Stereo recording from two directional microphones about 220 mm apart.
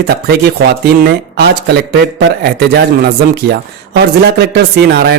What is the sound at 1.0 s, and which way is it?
A man's voice, 45° right (ahead or behind).